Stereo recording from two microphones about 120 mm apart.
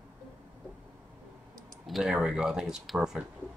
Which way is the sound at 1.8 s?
5° right (ahead or behind).